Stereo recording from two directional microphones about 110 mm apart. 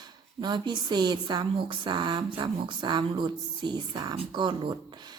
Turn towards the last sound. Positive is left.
turn(degrees=-45)  # may be behind; listen again after turning